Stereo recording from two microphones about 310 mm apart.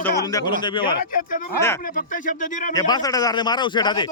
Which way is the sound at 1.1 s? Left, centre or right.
Left.